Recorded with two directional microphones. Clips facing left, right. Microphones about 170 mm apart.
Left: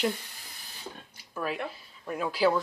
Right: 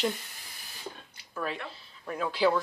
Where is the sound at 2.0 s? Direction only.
5° left (ahead or behind).